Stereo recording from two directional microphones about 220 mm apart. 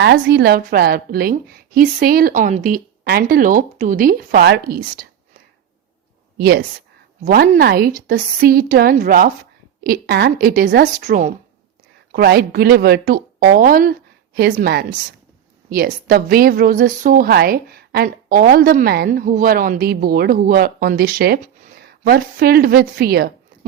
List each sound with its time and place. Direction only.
0.0 s a woman's voice: 50° right (ahead or behind)
6.4 s a woman's voice: 45° right (ahead or behind)
12.1 s a woman's voice: 45° right (ahead or behind)